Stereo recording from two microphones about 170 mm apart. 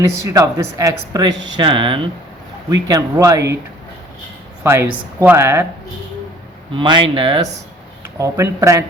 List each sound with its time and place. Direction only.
0.0 s speech: 20° right (ahead or behind)
2.8 s speech: 20° right (ahead or behind)
4.6 s speech: 15° right (ahead or behind)
6.7 s speech: 30° right (ahead or behind)
8.0 s speech: 15° right (ahead or behind)